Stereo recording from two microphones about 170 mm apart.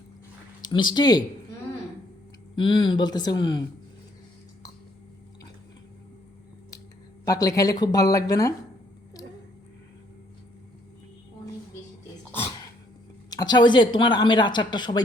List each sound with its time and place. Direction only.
0.6 s speech: 25° left (ahead or behind)
2.6 s a woman's voice: 30° left (ahead or behind)
7.3 s a woman's voice: 20° left (ahead or behind)
13.3 s a woman's voice: 25° left (ahead or behind)